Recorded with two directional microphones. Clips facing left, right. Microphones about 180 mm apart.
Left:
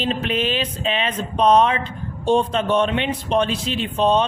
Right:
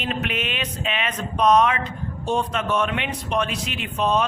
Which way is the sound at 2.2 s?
30° left (ahead or behind).